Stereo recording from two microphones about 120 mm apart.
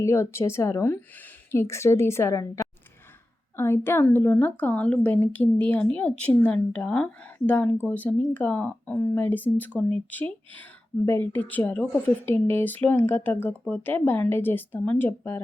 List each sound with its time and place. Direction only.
0.0 s a woman's voice: 25° left (ahead or behind)